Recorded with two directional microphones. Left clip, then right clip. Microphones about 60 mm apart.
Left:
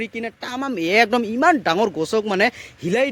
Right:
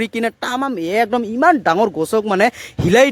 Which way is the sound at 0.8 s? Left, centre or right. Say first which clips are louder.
Left 3 dB; centre.